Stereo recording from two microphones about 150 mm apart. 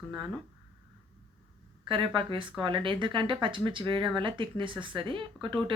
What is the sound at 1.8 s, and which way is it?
Speech, 35° right (ahead or behind).